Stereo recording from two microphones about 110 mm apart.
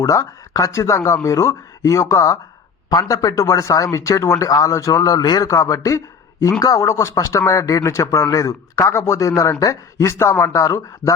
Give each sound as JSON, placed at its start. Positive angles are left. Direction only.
{"t": 0.0, "sound": "a man's voice", "side_deg": 30}